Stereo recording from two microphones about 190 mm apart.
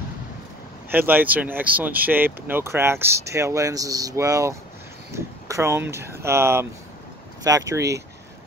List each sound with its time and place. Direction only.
0.9 s speech: 10° right (ahead or behind)